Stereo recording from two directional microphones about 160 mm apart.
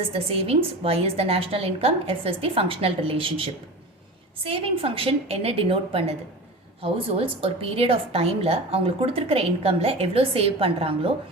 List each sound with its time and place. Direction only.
0.1 s a woman's voice: 40° right (ahead or behind)